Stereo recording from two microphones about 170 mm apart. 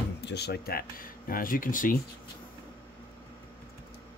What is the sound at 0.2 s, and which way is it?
Speech, 80° left.